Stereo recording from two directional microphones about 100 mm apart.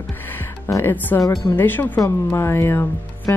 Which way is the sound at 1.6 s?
20° left (ahead or behind).